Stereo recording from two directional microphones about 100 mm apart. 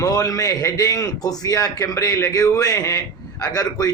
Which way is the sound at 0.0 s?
35° left (ahead or behind).